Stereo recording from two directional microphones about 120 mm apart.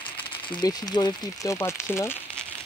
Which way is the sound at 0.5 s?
35° left (ahead or behind).